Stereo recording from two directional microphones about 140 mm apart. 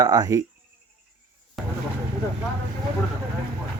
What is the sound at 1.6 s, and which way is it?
Vehicle, centre (ahead or behind).